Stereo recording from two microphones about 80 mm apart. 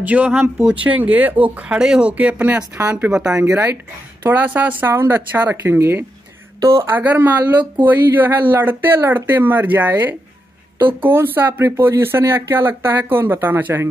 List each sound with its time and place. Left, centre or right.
0.0 s speech: centre
4.2 s speech: right
6.9 s speech: right